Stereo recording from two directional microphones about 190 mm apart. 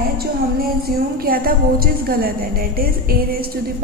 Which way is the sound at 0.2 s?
50° right (ahead or behind).